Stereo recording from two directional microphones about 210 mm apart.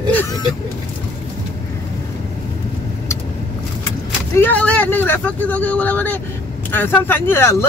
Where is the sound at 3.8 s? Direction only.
10° left (ahead or behind).